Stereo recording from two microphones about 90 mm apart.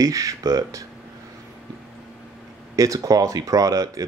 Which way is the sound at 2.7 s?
40° right (ahead or behind).